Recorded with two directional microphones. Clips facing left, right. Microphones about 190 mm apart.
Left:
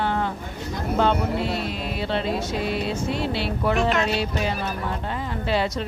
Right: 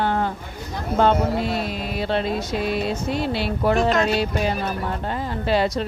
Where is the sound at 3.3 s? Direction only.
40° right (ahead or behind).